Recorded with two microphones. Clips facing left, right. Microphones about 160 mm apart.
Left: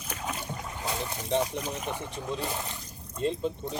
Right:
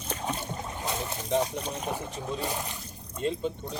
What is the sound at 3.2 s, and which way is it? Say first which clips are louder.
Speech: left 1 dB; centre (ahead or behind).